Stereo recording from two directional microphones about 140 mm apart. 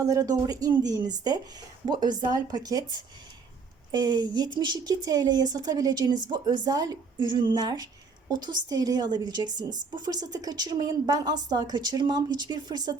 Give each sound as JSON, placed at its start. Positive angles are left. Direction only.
{"t": 0.0, "sound": "a woman's voice", "side_deg": -25}
{"t": 3.9, "sound": "a woman's voice", "side_deg": -30}